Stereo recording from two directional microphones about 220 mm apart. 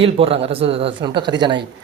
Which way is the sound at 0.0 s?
25° right (ahead or behind).